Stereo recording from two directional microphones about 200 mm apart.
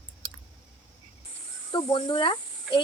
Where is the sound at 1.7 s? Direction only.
25° left (ahead or behind).